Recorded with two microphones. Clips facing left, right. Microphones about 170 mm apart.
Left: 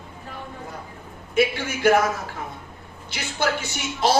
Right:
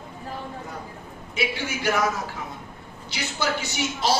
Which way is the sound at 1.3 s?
50° left (ahead or behind).